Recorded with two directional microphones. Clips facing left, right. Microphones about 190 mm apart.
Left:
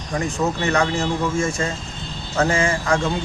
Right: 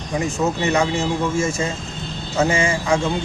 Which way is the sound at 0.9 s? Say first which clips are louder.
Right 1 dB; centre (ahead or behind).